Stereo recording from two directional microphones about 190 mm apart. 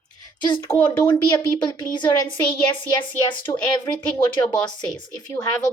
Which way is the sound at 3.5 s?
20° left (ahead or behind).